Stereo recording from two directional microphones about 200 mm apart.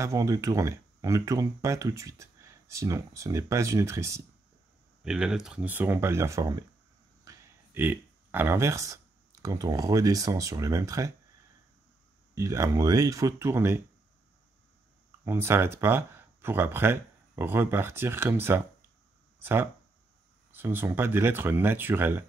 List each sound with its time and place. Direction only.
0.0 s speech: 15° right (ahead or behind)
5.0 s speech: 5° right (ahead or behind)
12.4 s speech: 15° right (ahead or behind)
15.2 s speech: 10° right (ahead or behind)